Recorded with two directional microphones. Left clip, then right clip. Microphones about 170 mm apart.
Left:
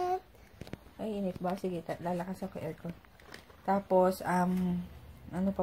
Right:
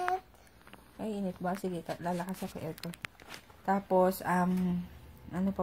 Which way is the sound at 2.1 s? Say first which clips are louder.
Right 1 dB; 20° right (ahead or behind).